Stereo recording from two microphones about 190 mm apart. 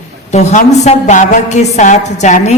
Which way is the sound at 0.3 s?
35° left (ahead or behind).